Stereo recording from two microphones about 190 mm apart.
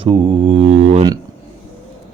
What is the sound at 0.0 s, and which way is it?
Mantra, 25° right (ahead or behind).